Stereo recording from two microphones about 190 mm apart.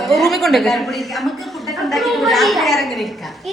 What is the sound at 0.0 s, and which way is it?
Speech, centre (ahead or behind).